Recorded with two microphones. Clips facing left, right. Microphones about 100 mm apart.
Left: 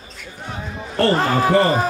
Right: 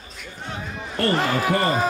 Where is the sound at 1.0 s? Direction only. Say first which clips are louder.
Left 4 dB; 35° left (ahead or behind).